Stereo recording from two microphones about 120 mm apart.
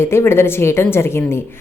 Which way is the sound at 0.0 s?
20° left (ahead or behind).